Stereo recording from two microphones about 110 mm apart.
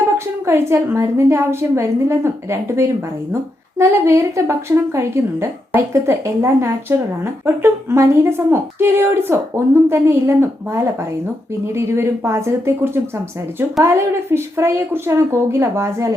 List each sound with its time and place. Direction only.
0.4 s a woman's voice: 25° right (ahead or behind)